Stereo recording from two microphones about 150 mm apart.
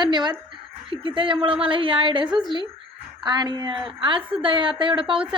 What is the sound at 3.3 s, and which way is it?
A woman's voice, 30° right (ahead or behind).